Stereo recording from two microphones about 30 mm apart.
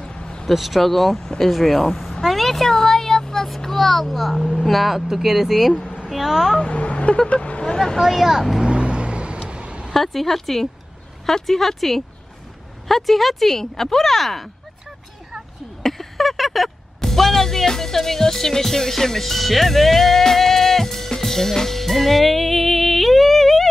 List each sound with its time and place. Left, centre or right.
0.0 s vehicle: left
0.5 s speech: centre
2.7 s a sound: centre
3.4 s a woman's voice: centre
6.6 s speech: left
7.6 s speech: left
8.0 s speech: centre
8.6 s vehicle: right
9.5 s a sound: right
9.9 s speech: centre
15.8 s a sound: centre
17.1 s speech: centre
21.2 s music: centre